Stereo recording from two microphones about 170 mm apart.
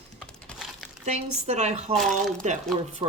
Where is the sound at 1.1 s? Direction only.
40° right (ahead or behind).